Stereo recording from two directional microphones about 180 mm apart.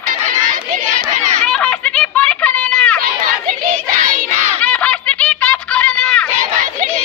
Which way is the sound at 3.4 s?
40° right (ahead or behind).